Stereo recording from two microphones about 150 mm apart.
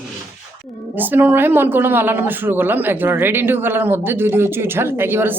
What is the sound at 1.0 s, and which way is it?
A woman's voice, 10° right (ahead or behind).